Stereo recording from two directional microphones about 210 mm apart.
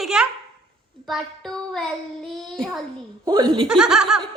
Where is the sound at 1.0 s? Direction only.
Centre (ahead or behind).